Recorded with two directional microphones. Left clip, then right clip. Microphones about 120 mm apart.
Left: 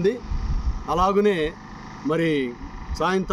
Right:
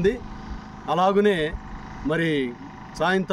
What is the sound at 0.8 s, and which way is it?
Speech, 20° right (ahead or behind).